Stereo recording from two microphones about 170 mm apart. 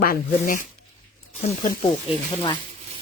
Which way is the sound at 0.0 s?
55° left (ahead or behind).